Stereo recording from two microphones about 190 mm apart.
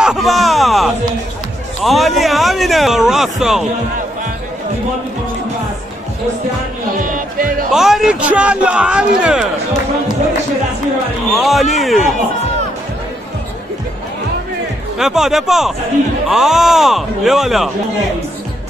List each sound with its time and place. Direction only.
0.0 s a sound: centre (ahead or behind)
6.9 s music: 45° right (ahead or behind)
7.7 s speech: centre (ahead or behind)
11.3 s speech: centre (ahead or behind)
15.0 s speech: centre (ahead or behind)